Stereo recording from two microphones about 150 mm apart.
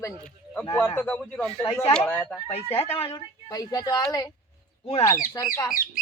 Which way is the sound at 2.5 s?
40° left (ahead or behind).